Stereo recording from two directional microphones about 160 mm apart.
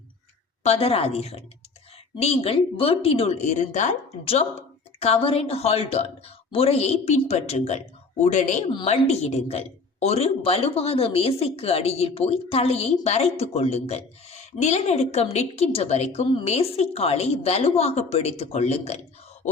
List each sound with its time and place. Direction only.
0.6 s speech: 40° left (ahead or behind)